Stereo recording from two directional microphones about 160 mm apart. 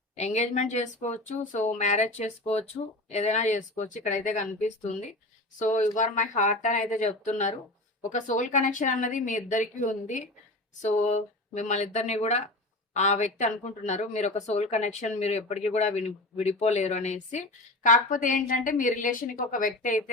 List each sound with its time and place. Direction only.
0.2 s a woman's voice: 45° left (ahead or behind)